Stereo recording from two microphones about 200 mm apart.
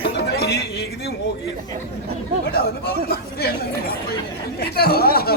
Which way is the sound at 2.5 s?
50° left (ahead or behind).